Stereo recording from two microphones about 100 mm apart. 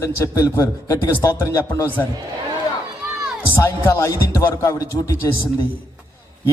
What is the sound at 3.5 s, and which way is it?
A man's voice, 25° left (ahead or behind).